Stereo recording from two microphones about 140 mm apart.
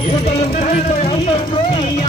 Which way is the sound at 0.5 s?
55° left (ahead or behind).